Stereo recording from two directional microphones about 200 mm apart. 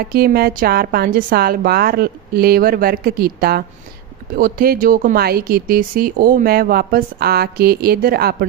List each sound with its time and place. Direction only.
0.1 s speech: 50° right (ahead or behind)